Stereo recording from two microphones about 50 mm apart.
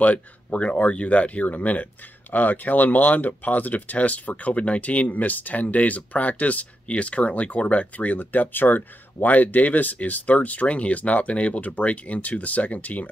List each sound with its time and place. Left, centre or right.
0.0 s speech: left